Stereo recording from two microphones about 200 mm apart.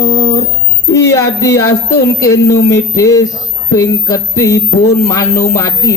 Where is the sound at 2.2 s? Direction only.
15° left (ahead or behind).